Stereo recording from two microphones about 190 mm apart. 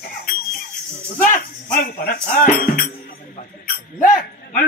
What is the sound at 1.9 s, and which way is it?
Speech, 50° left (ahead or behind).